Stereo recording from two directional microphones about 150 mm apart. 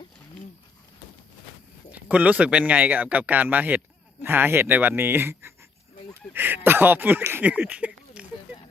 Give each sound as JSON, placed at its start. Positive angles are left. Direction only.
{"t": 1.9, "sound": "speech", "side_deg": -10}